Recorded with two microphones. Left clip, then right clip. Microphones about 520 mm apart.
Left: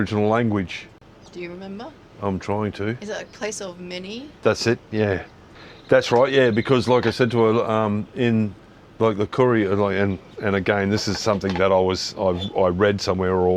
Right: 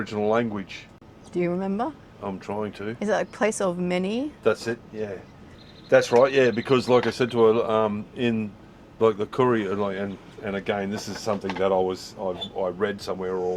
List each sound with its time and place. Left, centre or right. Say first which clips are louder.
0.0 s speech: left 3 dB; left
1.3 s a woman's voice: right 8 dB; right
2.2 s speech: left 6 dB; left
3.0 s a woman's voice: right 6 dB; right
4.4 s speech: left 5 dB; left
5.9 s speech: left 1 dB; left